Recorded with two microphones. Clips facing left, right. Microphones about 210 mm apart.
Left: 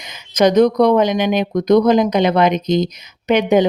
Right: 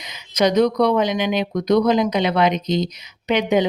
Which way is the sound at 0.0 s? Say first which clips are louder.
Left 4 dB; 50° left (ahead or behind).